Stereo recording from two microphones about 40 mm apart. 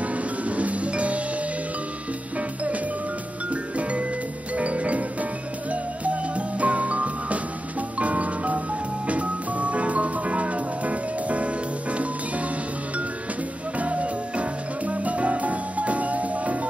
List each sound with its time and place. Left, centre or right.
0.0 s music: right
2.3 s music: right
4.6 s music: right
13.7 s music: right